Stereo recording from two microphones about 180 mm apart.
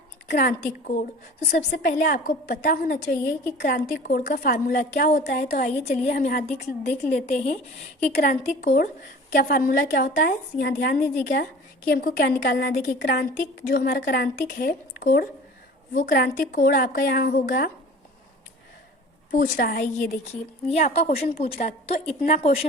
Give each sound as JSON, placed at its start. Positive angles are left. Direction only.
{"t": 0.3, "sound": "a woman's voice", "side_deg": 65}
{"t": 1.5, "sound": "a woman's voice", "side_deg": 50}
{"t": 5.7, "sound": "speech", "side_deg": 35}
{"t": 8.1, "sound": "a woman's voice", "side_deg": 50}
{"t": 9.3, "sound": "a woman's voice", "side_deg": 55}
{"t": 12.7, "sound": "a woman's voice", "side_deg": 55}
{"t": 19.3, "sound": "a woman's voice", "side_deg": 55}
{"t": 20.7, "sound": "speech", "side_deg": 35}